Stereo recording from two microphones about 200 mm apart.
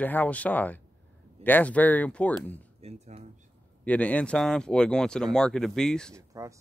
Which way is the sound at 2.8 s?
30° right (ahead or behind).